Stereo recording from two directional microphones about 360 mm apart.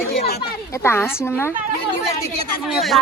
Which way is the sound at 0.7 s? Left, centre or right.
Centre.